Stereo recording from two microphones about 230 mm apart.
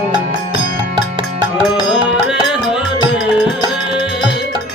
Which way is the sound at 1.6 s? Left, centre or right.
Centre.